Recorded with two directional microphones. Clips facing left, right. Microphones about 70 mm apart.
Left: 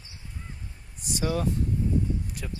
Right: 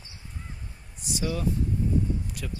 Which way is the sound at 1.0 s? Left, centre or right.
Left.